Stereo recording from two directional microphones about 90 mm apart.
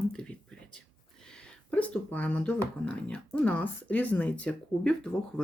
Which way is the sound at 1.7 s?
15° left (ahead or behind).